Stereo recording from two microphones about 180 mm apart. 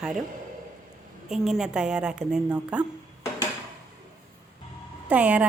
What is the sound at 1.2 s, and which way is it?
A woman's voice, centre (ahead or behind).